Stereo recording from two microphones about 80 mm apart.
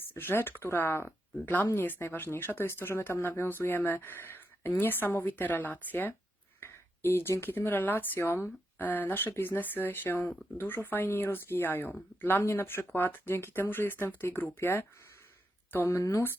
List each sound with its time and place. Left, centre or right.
0.1 s speech: left